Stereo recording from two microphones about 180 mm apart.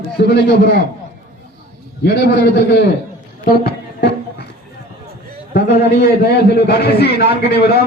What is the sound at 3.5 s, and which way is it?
Music, 60° left (ahead or behind).